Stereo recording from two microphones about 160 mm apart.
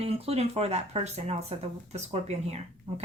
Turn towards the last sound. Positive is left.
turn(degrees=-40)  # may be behind; listen again after turning